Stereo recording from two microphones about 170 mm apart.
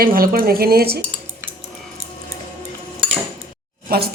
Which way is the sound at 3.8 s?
65° right (ahead or behind).